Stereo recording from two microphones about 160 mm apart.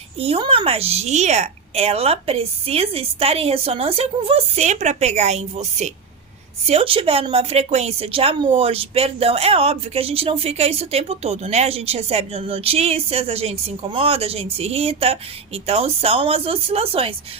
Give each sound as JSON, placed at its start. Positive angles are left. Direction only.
{"t": 0.2, "sound": "a woman's voice", "side_deg": -35}